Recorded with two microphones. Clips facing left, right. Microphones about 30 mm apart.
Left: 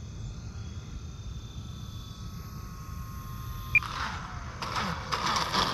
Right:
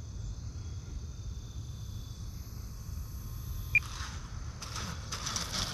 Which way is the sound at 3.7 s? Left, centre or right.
Left.